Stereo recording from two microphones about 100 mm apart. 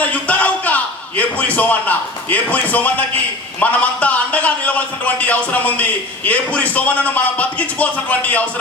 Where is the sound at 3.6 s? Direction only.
15° left (ahead or behind).